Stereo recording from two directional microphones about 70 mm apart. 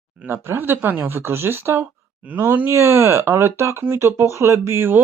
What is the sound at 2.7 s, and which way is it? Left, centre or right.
Speech, right.